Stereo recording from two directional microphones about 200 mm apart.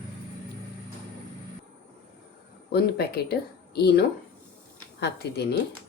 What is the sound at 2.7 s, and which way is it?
Speech, 50° left (ahead or behind).